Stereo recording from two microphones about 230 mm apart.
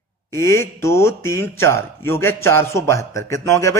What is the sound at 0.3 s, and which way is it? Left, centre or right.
Speech, centre.